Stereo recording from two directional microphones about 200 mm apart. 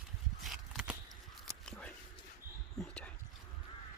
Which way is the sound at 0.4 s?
Centre (ahead or behind).